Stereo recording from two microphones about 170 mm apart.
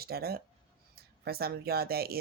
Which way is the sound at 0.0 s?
65° right (ahead or behind).